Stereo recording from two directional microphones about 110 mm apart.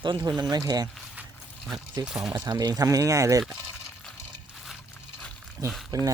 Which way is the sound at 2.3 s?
40° right (ahead or behind).